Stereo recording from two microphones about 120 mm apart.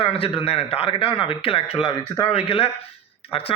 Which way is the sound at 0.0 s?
50° left (ahead or behind).